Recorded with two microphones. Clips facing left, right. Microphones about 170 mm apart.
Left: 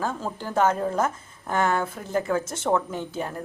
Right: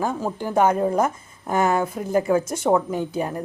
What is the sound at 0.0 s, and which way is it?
A woman's voice, 15° right (ahead or behind).